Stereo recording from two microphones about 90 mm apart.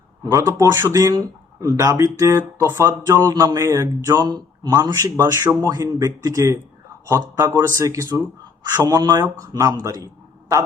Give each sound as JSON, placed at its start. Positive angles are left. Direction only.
{"t": 0.3, "sound": "speech", "side_deg": -40}
{"t": 1.1, "sound": "speech", "side_deg": -50}
{"t": 1.7, "sound": "speech", "side_deg": -35}
{"t": 4.2, "sound": "a man's voice", "side_deg": -50}
{"t": 5.0, "sound": "speech", "side_deg": -35}
{"t": 5.7, "sound": "speech", "side_deg": -45}
{"t": 8.8, "sound": "speech", "side_deg": -50}